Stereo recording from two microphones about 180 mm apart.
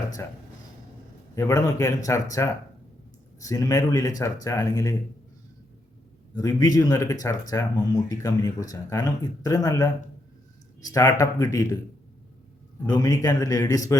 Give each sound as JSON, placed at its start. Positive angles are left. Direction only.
{"t": 1.4, "sound": "speech", "side_deg": 20}
{"t": 3.4, "sound": "speech", "side_deg": 20}
{"t": 6.3, "sound": "speech", "side_deg": 20}
{"t": 12.8, "sound": "speech", "side_deg": 20}